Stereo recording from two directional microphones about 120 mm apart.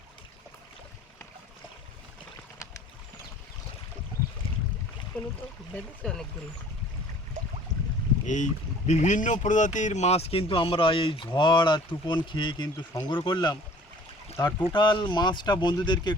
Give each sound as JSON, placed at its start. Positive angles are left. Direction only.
{"t": 5.1, "sound": "a sound", "side_deg": 15}
{"t": 5.7, "sound": "speech", "side_deg": 10}
{"t": 8.9, "sound": "speech", "side_deg": 90}
{"t": 12.7, "sound": "speech", "side_deg": 25}
{"t": 13.1, "sound": "speech", "side_deg": 40}
{"t": 14.6, "sound": "speech", "side_deg": 40}